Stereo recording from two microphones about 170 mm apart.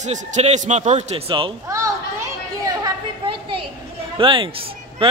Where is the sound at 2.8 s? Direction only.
30° right (ahead or behind).